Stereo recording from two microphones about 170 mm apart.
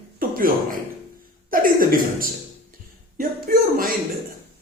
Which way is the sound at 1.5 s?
55° right (ahead or behind).